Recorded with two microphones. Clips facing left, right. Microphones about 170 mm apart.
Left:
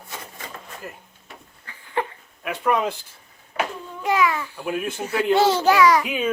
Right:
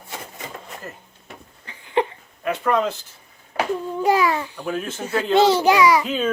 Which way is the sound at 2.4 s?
10° left (ahead or behind).